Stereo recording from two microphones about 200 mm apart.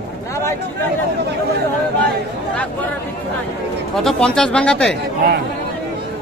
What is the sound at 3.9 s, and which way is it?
Speech, 5° left (ahead or behind).